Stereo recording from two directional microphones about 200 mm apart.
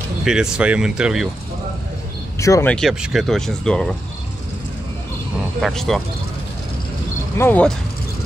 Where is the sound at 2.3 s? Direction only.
15° left (ahead or behind).